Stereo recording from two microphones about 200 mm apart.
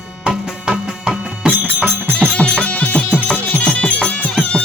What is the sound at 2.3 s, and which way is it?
Music, 5° left (ahead or behind).